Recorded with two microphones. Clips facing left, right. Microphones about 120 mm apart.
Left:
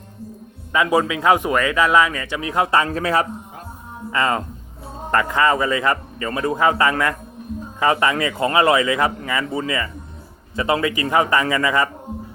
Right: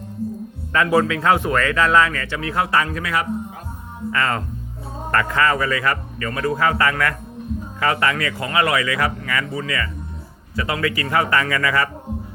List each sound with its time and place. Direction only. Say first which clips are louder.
0.7 s a man's voice: even; 15° left (ahead or behind); by 3.2 s 30° left (ahead or behind)
4.1 s speech: left 2 dB; 20° left (ahead or behind)